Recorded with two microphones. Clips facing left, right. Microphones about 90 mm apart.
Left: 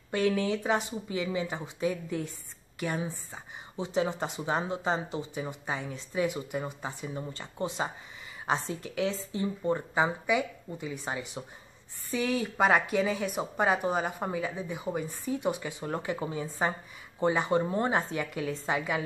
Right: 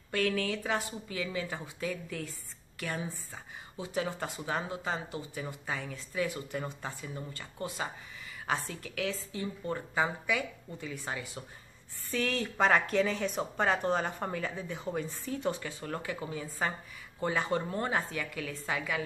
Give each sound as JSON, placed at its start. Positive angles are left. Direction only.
{"t": 0.1, "sound": "a woman's voice", "side_deg": 20}